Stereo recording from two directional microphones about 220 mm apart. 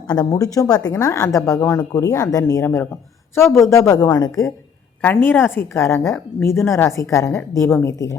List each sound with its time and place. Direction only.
0.1 s a woman's voice: 15° left (ahead or behind)